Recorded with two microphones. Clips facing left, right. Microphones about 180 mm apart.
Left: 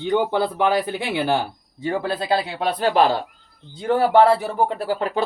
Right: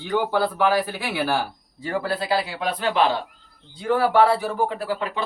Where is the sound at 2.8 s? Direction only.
40° left (ahead or behind).